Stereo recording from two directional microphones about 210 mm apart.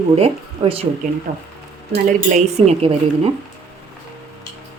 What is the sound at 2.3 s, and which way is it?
Speech, 30° right (ahead or behind).